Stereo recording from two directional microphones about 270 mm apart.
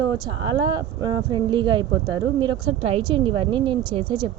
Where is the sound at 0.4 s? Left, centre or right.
Centre.